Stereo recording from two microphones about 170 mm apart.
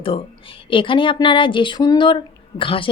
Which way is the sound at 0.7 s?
30° left (ahead or behind).